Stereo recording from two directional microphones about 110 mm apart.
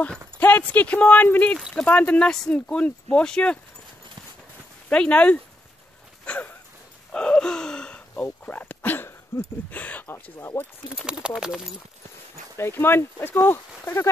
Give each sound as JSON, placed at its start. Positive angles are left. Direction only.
{"t": 0.4, "sound": "speech", "side_deg": 15}
{"t": 4.8, "sound": "speech", "side_deg": 10}
{"t": 6.2, "sound": "a sound", "side_deg": 10}
{"t": 7.1, "sound": "gasp", "side_deg": 10}
{"t": 9.7, "sound": "speech", "side_deg": 15}
{"t": 11.1, "sound": "speech", "side_deg": -10}
{"t": 12.5, "sound": "speech", "side_deg": 20}